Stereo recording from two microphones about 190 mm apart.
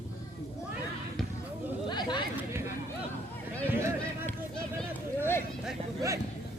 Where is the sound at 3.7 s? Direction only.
10° right (ahead or behind).